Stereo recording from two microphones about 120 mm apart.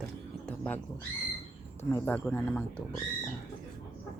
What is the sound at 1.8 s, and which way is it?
Speech, 20° left (ahead or behind).